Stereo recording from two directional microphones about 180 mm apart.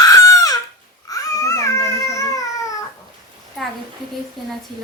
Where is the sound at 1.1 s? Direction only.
20° left (ahead or behind).